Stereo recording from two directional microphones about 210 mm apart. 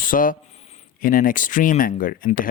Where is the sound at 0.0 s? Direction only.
40° left (ahead or behind).